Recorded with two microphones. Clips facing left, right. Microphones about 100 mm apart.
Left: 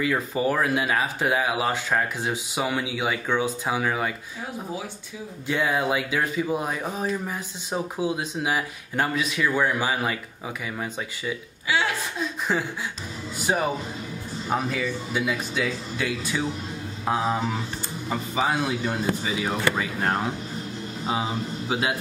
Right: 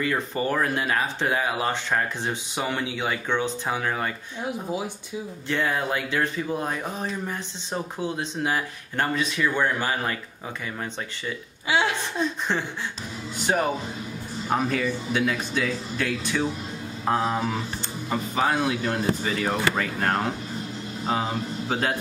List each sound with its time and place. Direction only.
0.0 s speech: 5° left (ahead or behind)
5.5 s speech: 10° left (ahead or behind)
11.6 s hiccup: 25° right (ahead or behind)
12.2 s a sound: 5° left (ahead or behind)
13.5 s speech: 10° left (ahead or behind)